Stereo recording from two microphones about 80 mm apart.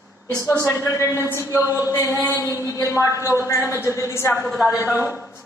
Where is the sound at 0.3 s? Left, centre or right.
Left.